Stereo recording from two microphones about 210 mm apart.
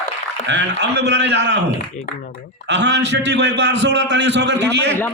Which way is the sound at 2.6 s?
55° right (ahead or behind).